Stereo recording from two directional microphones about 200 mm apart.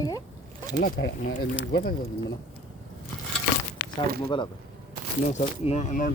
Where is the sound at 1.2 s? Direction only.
45° left (ahead or behind).